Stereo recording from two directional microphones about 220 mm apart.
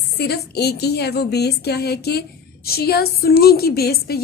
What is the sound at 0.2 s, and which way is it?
A woman's voice, 45° left (ahead or behind).